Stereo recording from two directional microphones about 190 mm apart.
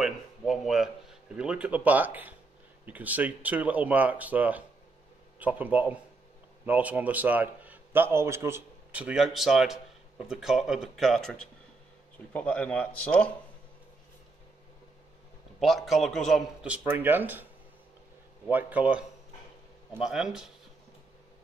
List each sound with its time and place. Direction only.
0.0 s a sound: centre (ahead or behind)
1.3 s a man's voice: 5° right (ahead or behind)
15.6 s a man's voice: centre (ahead or behind)
18.5 s a man's voice: 10° right (ahead or behind)